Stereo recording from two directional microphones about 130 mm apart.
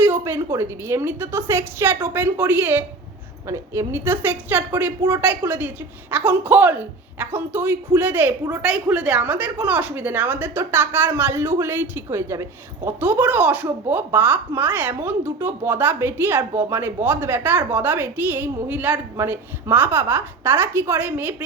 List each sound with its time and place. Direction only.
0.0 s a woman's voice: 20° right (ahead or behind)